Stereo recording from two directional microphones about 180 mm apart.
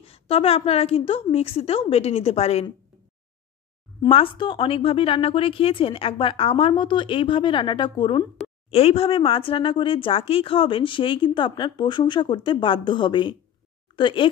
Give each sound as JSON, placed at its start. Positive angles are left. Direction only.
{"t": 0.0, "sound": "a woman's voice", "side_deg": 35}
{"t": 4.1, "sound": "speech", "side_deg": 30}